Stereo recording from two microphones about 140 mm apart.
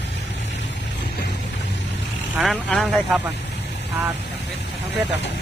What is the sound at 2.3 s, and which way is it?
Speech, centre (ahead or behind).